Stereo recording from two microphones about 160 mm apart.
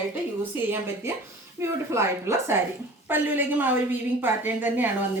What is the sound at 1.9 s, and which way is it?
A woman's voice, 15° right (ahead or behind).